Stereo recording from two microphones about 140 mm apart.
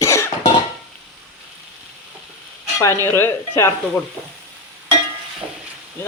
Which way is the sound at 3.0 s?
15° left (ahead or behind).